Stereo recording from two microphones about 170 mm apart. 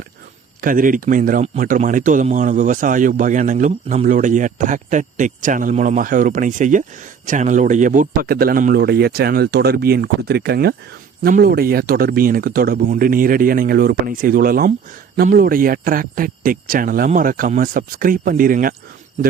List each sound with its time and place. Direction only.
0.6 s speech: 55° right (ahead or behind)